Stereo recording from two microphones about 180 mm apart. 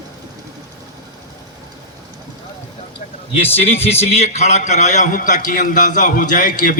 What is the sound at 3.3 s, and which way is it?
A man's voice, 35° left (ahead or behind).